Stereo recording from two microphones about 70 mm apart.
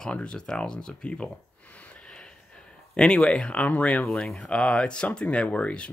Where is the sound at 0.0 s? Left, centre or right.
Centre.